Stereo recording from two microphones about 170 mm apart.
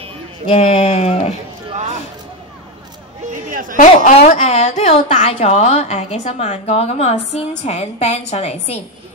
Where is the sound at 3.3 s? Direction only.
50° right (ahead or behind).